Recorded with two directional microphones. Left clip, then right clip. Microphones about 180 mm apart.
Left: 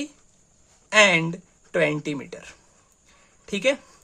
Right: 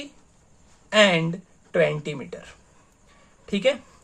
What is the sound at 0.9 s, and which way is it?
Speech, 35° left (ahead or behind).